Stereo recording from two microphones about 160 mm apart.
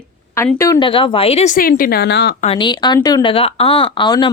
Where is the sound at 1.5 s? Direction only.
60° left (ahead or behind); by 2.3 s 85° left.